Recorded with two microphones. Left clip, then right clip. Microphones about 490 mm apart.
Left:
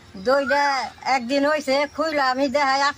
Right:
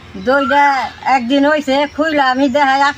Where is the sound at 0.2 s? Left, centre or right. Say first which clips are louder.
Right 8 dB; left.